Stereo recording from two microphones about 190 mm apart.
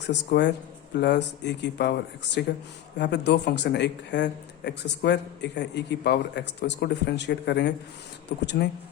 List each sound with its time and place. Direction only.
0.0 s speech: 65° left (ahead or behind)